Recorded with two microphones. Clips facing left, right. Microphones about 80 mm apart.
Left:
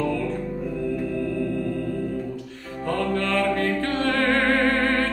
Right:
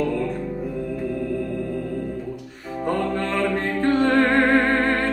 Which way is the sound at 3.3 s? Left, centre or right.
Right.